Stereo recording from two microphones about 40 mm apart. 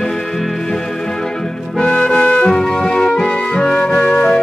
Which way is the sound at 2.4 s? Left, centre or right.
Centre.